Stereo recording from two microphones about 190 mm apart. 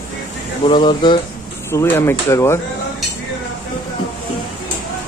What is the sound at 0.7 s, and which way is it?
Speech, 25° left (ahead or behind).